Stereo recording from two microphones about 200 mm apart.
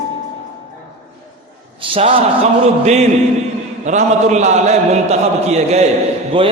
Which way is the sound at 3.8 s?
35° right (ahead or behind).